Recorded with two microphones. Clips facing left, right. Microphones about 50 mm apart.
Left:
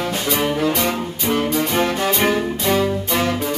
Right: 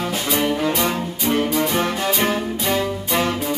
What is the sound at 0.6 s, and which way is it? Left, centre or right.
Music, centre.